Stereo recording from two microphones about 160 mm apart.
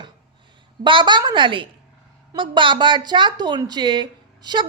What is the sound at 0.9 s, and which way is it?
A woman's voice, 30° right (ahead or behind).